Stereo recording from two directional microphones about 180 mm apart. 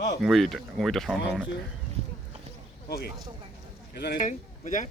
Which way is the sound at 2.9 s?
60° left (ahead or behind).